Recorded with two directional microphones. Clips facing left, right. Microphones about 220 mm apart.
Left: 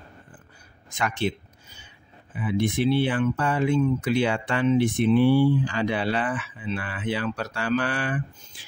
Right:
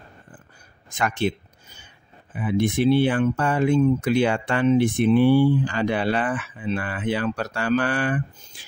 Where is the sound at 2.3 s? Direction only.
45° right (ahead or behind).